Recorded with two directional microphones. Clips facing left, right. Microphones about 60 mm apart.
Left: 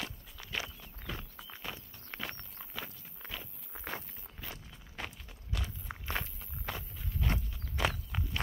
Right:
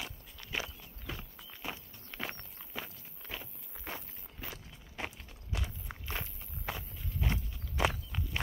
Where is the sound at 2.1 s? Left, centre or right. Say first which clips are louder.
Right 1 dB; left.